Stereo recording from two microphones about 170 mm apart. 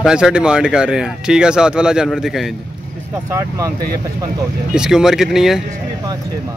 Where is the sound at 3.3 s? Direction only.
15° right (ahead or behind).